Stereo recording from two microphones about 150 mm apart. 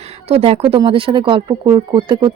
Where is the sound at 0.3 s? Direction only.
40° right (ahead or behind).